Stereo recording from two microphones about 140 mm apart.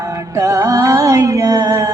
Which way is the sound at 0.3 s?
20° right (ahead or behind).